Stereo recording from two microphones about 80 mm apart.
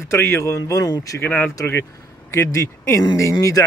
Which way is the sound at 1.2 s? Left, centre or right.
Left.